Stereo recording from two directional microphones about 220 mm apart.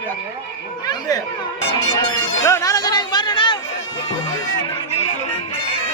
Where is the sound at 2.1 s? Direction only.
15° left (ahead or behind).